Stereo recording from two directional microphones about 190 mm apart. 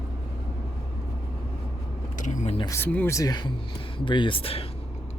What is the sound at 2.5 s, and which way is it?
Speech, 15° left (ahead or behind).